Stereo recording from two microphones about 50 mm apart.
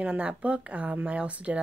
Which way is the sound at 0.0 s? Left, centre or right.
Right.